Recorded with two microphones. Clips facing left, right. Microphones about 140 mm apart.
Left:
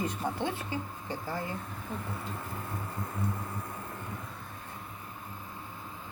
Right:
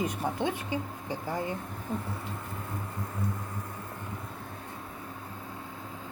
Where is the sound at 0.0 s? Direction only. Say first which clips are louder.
Right 2 dB; 15° right (ahead or behind).